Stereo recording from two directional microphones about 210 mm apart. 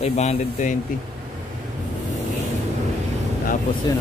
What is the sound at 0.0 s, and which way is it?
Speech, 30° left (ahead or behind).